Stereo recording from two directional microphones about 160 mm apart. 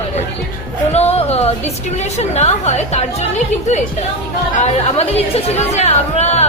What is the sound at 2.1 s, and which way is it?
Speech, 45° left (ahead or behind).